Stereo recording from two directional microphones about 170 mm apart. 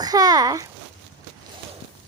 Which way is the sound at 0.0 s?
20° right (ahead or behind).